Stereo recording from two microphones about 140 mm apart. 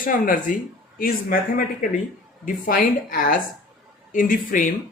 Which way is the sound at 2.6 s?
85° left.